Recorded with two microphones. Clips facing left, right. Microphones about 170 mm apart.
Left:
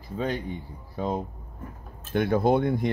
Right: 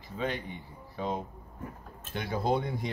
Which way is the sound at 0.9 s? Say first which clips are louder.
Left 5 dB; 40° left (ahead or behind).